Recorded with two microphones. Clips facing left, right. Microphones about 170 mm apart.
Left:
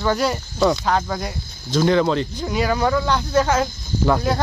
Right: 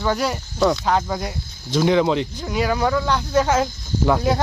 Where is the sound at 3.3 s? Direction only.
20° right (ahead or behind).